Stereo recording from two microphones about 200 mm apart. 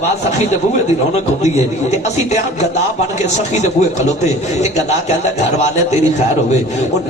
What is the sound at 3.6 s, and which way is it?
A man's voice, 35° left (ahead or behind).